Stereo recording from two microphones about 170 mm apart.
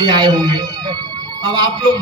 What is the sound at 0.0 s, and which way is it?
A man's voice, 25° right (ahead or behind).